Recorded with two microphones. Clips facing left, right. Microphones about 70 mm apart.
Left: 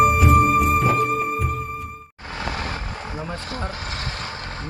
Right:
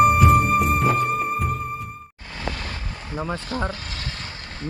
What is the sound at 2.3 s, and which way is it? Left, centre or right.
Vehicle, left.